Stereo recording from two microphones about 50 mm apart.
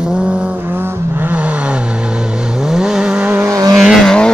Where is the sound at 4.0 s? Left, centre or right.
Centre.